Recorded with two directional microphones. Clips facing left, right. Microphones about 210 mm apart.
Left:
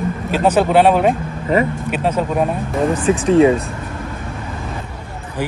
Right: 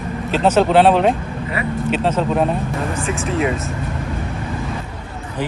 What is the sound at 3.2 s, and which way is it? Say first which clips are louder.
Speech: left 10 dB; 30° left (ahead or behind).